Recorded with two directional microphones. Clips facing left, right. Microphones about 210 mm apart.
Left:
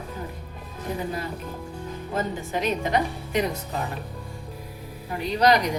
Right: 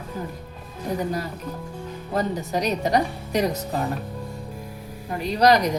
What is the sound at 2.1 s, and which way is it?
A woman's voice, 40° right (ahead or behind).